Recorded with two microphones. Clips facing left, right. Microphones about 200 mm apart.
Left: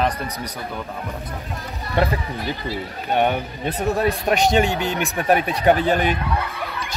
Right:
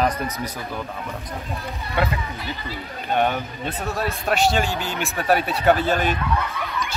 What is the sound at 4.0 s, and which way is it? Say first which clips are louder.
Speech: left 1 dB; 15° left (ahead or behind).